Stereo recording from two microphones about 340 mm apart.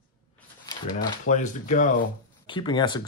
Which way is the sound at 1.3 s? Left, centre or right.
Left.